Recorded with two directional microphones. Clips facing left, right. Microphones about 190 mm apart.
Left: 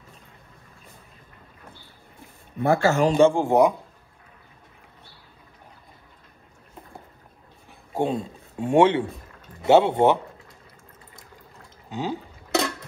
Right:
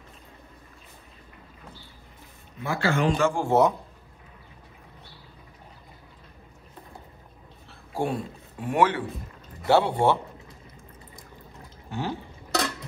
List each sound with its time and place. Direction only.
2.6 s a man's voice: 50° left (ahead or behind)
3.2 s speech: 30° left (ahead or behind)
3.4 s a man's voice: 15° left (ahead or behind)
7.9 s a man's voice: 20° left (ahead or behind)
11.9 s a sound: 15° left (ahead or behind)